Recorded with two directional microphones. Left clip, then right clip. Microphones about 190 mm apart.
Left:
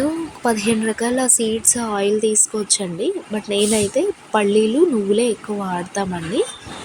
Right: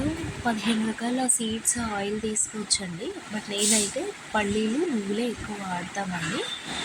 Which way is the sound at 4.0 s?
30° left (ahead or behind).